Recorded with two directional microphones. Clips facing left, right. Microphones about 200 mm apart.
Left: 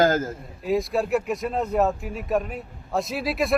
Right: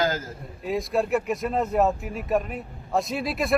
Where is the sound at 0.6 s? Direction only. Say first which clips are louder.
Left 2 dB; centre (ahead or behind).